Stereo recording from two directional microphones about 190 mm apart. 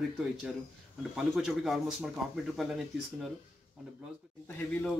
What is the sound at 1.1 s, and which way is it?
Speech, centre (ahead or behind).